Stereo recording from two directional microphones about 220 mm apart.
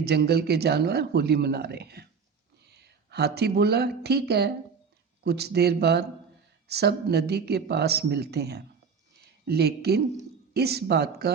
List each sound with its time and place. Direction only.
0.0 s speech: 45° right (ahead or behind)